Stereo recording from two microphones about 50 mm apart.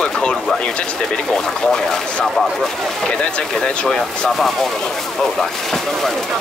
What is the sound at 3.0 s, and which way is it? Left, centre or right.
Speech, centre.